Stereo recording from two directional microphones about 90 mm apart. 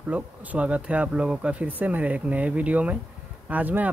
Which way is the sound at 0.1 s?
15° right (ahead or behind).